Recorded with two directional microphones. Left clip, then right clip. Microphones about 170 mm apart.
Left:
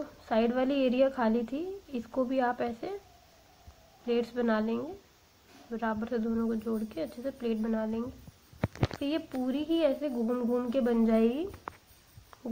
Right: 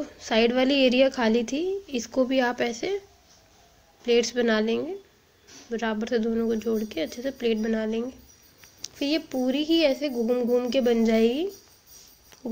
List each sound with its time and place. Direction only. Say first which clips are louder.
0.2 s a woman's voice: right 6 dB; 20° right (ahead or behind)
4.0 s a woman's voice: right 8 dB; 15° right (ahead or behind)